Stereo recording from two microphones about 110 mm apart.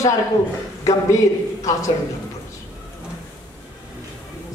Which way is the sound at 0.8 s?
30° left (ahead or behind).